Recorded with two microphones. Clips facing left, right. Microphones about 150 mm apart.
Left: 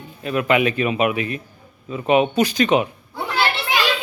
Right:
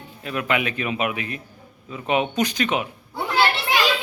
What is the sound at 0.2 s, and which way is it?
A man's voice, 20° left (ahead or behind).